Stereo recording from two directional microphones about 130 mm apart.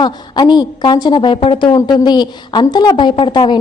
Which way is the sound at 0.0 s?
35° left (ahead or behind).